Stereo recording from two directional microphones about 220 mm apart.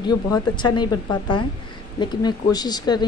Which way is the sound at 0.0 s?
20° left (ahead or behind).